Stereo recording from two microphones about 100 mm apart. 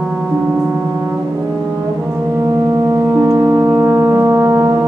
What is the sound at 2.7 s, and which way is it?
Music, 30° right (ahead or behind).